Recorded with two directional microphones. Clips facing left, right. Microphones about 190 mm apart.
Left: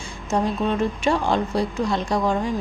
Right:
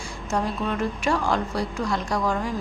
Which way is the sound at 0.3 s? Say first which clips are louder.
Left 4 dB; 20° left (ahead or behind).